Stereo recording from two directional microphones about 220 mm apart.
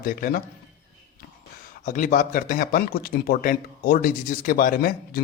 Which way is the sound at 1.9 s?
35° left (ahead or behind).